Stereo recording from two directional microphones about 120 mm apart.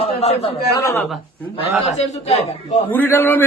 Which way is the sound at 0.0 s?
55° left (ahead or behind).